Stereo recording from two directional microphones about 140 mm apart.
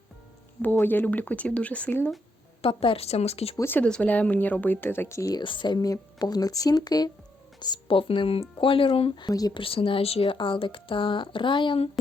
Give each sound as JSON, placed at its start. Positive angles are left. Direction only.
{"t": 0.6, "sound": "speech", "side_deg": 15}
{"t": 2.6, "sound": "speech", "side_deg": 40}
{"t": 3.6, "sound": "speech", "side_deg": 15}
{"t": 5.4, "sound": "speech", "side_deg": 35}
{"t": 9.6, "sound": "speech", "side_deg": 40}